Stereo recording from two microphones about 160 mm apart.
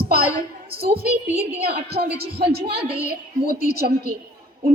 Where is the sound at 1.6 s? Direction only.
80° right.